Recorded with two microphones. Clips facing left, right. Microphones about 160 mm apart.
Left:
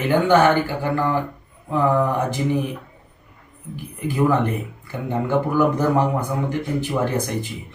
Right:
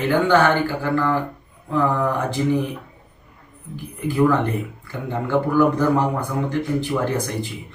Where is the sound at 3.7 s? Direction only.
15° left (ahead or behind).